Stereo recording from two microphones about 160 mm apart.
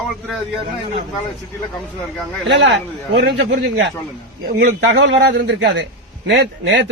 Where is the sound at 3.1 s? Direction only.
90° right.